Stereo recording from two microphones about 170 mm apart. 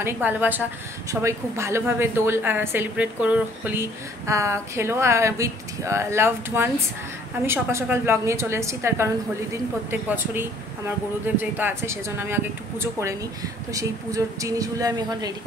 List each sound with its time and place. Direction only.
0.0 s a woman's voice: 10° right (ahead or behind)